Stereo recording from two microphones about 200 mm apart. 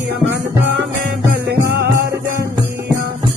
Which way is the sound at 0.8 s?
55° right (ahead or behind).